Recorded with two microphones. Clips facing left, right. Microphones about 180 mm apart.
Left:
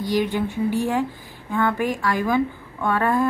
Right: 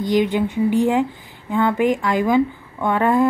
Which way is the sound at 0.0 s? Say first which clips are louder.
Right 4 dB; 20° right (ahead or behind).